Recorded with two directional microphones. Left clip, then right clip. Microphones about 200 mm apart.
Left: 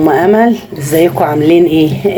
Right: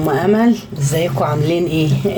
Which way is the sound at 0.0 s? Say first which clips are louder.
Left 7 dB; 5° left (ahead or behind).